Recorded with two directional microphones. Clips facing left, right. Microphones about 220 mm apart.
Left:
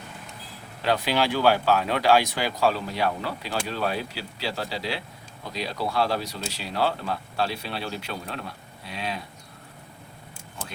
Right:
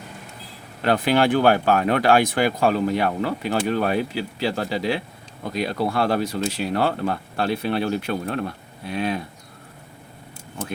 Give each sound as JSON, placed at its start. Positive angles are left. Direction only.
{"t": 0.9, "sound": "speech", "side_deg": -55}